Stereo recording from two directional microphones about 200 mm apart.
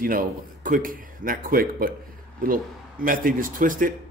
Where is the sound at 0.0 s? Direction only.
45° right (ahead or behind).